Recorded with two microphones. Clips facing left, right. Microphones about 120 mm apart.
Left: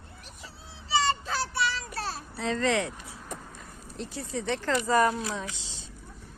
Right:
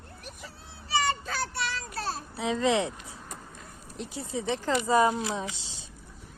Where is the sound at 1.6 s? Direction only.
50° right (ahead or behind).